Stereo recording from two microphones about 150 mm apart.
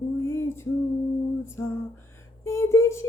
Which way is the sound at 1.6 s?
15° left (ahead or behind).